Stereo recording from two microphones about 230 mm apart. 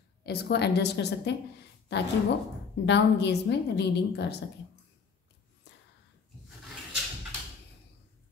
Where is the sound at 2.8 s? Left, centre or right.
Left.